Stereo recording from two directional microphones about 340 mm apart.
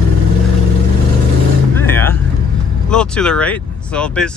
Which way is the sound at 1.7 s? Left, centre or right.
Centre.